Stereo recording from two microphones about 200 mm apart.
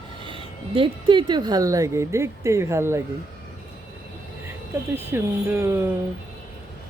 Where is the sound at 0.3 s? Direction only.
25° right (ahead or behind).